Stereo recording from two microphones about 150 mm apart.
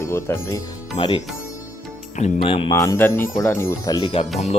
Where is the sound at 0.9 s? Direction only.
35° left (ahead or behind).